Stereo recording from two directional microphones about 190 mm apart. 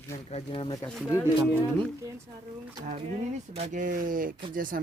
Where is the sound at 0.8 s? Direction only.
10° left (ahead or behind).